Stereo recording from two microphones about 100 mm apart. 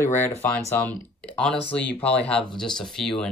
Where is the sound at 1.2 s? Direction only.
10° left (ahead or behind).